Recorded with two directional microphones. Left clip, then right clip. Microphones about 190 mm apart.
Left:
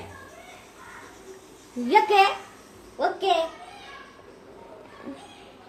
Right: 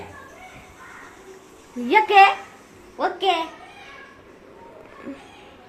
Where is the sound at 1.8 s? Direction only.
20° right (ahead or behind).